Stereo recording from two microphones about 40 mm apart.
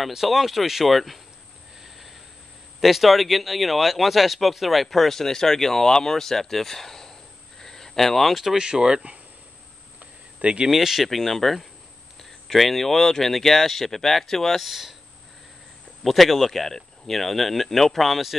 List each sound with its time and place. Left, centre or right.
0.1 s speech: centre
1.8 s a sound: centre
2.8 s speech: centre
8.5 s speech: centre
9.9 s a sound: right
10.7 s speech: centre
11.1 s speech: centre
14.7 s speech: centre
16.0 s speech: centre